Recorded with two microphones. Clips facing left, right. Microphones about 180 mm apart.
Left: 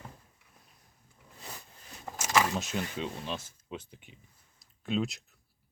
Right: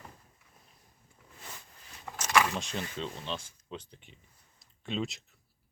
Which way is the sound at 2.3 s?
25° left (ahead or behind).